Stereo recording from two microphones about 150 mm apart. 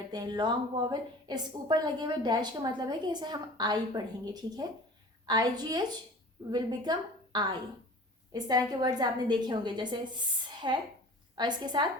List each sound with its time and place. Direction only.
0.1 s a woman's voice: 30° right (ahead or behind)
10.4 s a sound: 30° right (ahead or behind)
11.3 s a woman's voice: 30° right (ahead or behind)